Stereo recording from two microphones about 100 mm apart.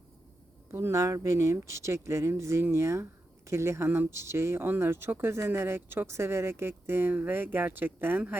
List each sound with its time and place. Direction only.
0.7 s speech: 25° right (ahead or behind)